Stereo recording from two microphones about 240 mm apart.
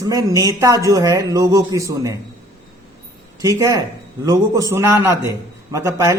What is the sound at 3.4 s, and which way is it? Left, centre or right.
A man's voice, centre.